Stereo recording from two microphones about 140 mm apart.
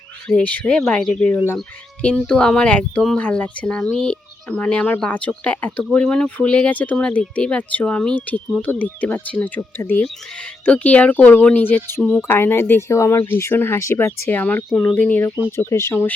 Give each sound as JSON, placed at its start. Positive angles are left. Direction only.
{"t": 0.3, "sound": "speech", "side_deg": 10}